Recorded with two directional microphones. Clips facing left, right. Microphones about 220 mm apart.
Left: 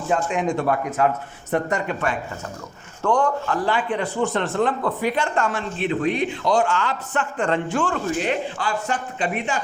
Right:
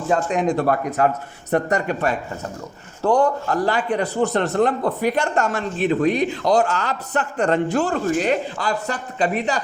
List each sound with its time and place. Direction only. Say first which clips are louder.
0.1 s a man's voice: right 2 dB; 40° right (ahead or behind)